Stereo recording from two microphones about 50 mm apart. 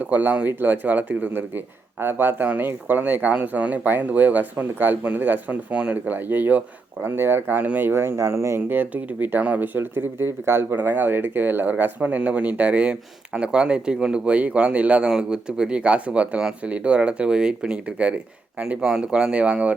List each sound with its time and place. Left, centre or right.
0.0 s a man's voice: right
7.0 s speech: right
7.4 s speech: right
8.7 s a man's voice: right
11.7 s speech: right